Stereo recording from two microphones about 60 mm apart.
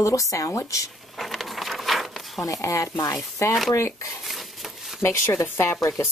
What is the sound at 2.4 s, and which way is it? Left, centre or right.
Speech, left.